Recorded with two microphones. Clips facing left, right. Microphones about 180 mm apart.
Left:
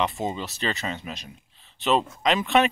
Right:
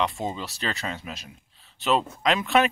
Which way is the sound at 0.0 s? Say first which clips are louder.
Left 1 dB; centre (ahead or behind).